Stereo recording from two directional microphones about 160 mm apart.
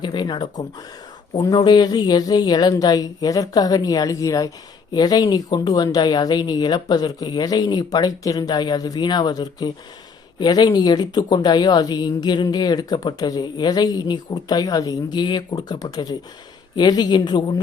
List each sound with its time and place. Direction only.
0.0 s speech: 30° left (ahead or behind)